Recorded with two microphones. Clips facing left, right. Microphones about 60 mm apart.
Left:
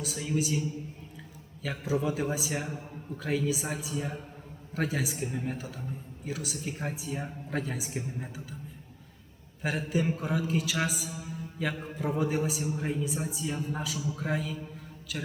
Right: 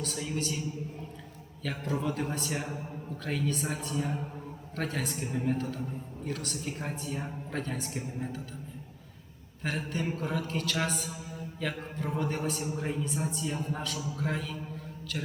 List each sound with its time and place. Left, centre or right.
0.0 s a woman's voice: centre
1.6 s a woman's voice: centre
9.6 s a man's voice: centre